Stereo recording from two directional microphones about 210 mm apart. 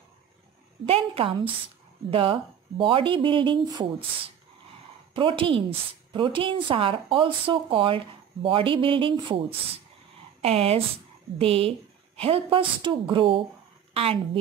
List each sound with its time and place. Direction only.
0.8 s a woman's voice: 25° right (ahead or behind)
5.1 s a woman's voice: 25° right (ahead or behind)